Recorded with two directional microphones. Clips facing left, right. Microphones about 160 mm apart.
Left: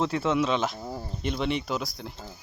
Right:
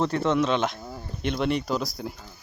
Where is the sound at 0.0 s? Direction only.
5° left (ahead or behind).